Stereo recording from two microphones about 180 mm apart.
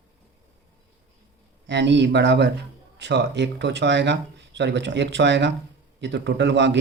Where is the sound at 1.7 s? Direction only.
75° right (ahead or behind).